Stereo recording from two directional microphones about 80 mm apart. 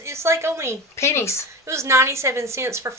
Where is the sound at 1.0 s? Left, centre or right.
Left.